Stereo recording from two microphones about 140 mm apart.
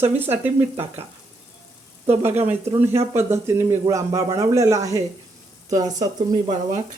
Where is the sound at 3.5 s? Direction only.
15° right (ahead or behind).